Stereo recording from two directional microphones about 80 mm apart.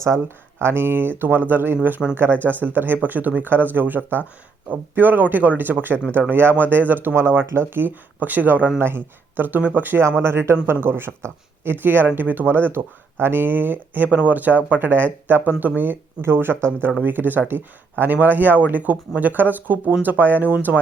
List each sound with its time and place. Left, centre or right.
0.6 s speech: right